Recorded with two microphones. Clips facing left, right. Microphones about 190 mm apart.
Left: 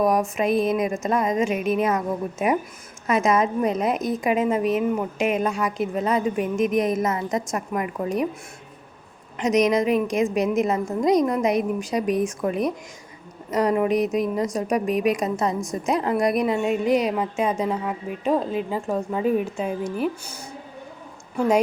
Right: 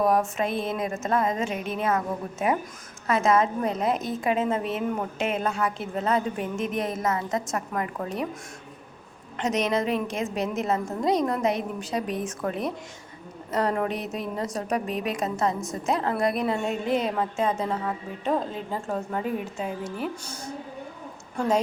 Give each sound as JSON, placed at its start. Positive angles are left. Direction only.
{"t": 0.0, "sound": "a woman's voice", "side_deg": 15}
{"t": 9.4, "sound": "a woman's voice", "side_deg": 10}